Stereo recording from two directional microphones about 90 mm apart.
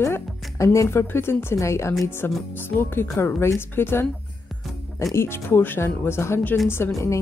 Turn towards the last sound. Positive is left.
turn(degrees=25)  # may be behind; listen again after turning